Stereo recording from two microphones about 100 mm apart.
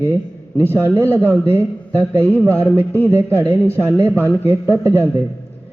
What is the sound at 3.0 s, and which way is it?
Speech, 25° right (ahead or behind).